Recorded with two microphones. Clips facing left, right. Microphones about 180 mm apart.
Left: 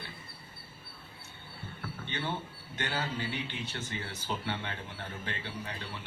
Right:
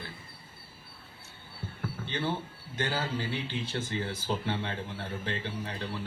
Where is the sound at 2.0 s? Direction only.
30° right (ahead or behind).